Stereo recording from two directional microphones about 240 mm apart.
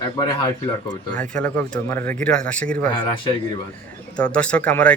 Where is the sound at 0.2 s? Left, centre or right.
Centre.